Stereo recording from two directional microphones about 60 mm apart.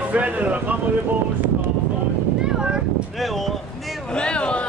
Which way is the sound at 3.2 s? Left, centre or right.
Centre.